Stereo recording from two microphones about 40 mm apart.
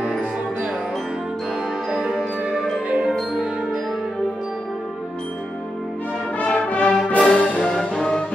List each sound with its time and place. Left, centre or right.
1.9 s music: centre
6.4 s brass instrument: left
7.7 s music: centre